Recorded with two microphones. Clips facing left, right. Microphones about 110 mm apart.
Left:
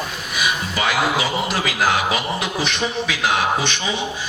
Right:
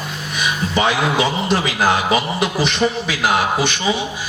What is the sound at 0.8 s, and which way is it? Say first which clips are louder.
Speech: right 4 dB; 30° right (ahead or behind).